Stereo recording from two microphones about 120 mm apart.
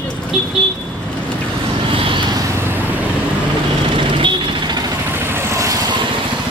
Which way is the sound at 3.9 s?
45° right (ahead or behind).